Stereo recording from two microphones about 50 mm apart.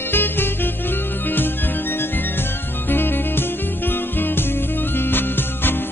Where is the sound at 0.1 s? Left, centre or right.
Left.